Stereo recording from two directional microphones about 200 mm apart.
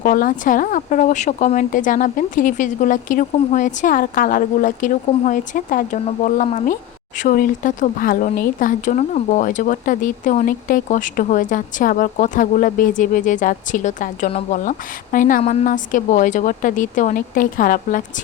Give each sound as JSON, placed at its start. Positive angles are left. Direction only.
{"t": 0.0, "sound": "speech", "side_deg": 45}